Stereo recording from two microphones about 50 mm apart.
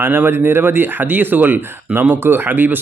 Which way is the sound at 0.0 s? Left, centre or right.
Right.